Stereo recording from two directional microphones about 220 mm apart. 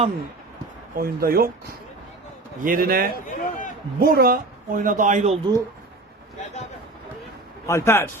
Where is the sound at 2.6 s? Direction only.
40° right (ahead or behind).